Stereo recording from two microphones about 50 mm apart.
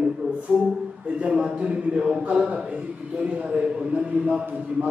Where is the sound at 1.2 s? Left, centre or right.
Right.